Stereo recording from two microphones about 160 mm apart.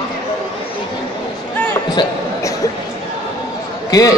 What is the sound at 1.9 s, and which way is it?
Basketball bounce, 25° left (ahead or behind).